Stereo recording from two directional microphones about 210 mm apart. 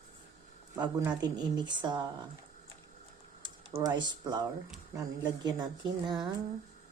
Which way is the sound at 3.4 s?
25° right (ahead or behind).